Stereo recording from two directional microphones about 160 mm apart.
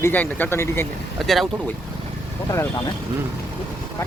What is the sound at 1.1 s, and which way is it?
Speech, centre (ahead or behind).